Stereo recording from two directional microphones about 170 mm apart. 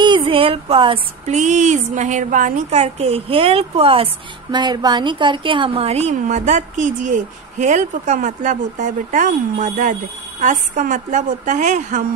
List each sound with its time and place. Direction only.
0.0 s a woman's voice: 30° right (ahead or behind); by 12.0 s 45° right (ahead or behind)